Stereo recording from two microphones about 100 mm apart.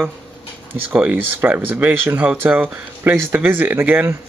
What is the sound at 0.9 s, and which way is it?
Speech, 15° right (ahead or behind).